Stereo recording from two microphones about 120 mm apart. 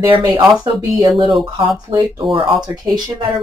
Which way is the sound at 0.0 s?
40° right (ahead or behind).